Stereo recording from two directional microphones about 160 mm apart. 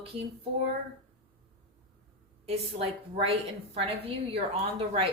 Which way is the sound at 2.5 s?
35° right (ahead or behind).